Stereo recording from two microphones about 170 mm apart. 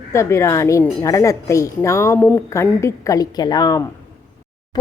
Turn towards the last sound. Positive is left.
turn(degrees=20)  # may be behind; listen again after turning